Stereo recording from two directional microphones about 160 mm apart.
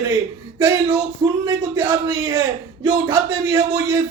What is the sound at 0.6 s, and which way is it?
Speech, 20° right (ahead or behind).